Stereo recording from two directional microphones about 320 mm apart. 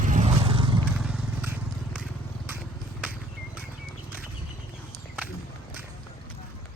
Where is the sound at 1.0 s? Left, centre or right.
Centre.